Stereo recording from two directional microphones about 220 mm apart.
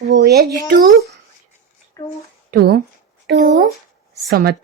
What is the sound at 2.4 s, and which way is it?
Speech, 45° right (ahead or behind).